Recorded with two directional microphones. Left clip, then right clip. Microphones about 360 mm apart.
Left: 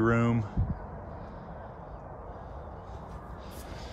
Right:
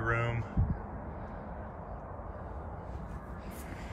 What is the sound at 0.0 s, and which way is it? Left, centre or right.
Speech, centre.